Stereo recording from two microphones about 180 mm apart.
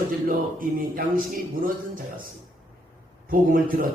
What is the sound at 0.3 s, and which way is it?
Speech, 50° right (ahead or behind).